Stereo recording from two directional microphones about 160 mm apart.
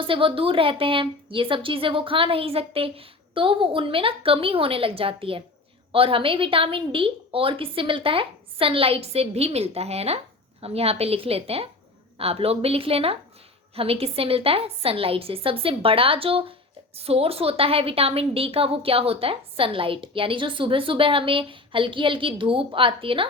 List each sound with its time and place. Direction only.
0.0 s a woman's voice: 35° right (ahead or behind)